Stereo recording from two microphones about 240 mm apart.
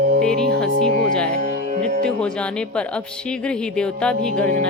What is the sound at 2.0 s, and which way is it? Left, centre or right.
A woman's voice, centre.